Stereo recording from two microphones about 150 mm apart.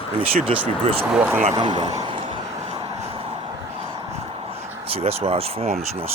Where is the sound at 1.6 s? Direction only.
30° right (ahead or behind).